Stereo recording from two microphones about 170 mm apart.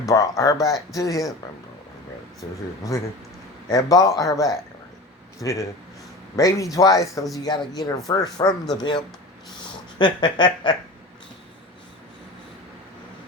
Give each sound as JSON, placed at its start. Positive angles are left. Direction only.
{"t": 0.0, "sound": "speech", "side_deg": 20}
{"t": 2.4, "sound": "speech", "side_deg": 25}
{"t": 10.0, "sound": "speech", "side_deg": 25}